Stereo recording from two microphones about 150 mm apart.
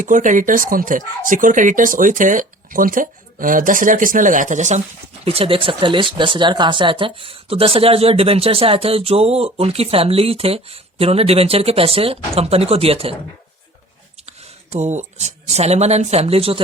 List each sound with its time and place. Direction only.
0.0 s speech: 60° right (ahead or behind)
5.2 s speech: 40° right (ahead or behind)
14.3 s speech: 50° right (ahead or behind)